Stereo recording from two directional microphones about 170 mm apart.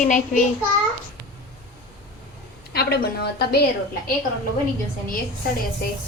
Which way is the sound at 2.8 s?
70° left (ahead or behind).